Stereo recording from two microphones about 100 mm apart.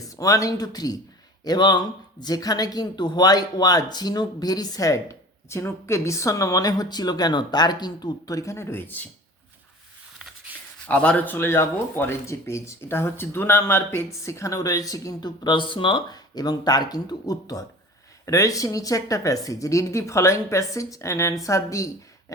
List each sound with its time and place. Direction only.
0.1 s speech: 35° left (ahead or behind)
10.5 s a sound: 15° right (ahead or behind)
10.8 s speech: 10° left (ahead or behind); by 15.3 s 35° left (ahead or behind)
15.4 s speech: 55° left (ahead or behind)
16.0 s speech: 40° left (ahead or behind)